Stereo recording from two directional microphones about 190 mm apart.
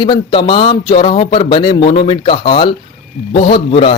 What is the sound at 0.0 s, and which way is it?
A man's voice, 25° left (ahead or behind).